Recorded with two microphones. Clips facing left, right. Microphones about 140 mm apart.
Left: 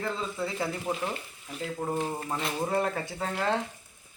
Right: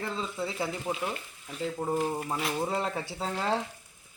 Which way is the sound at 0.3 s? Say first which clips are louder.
Left 1 dB; centre (ahead or behind).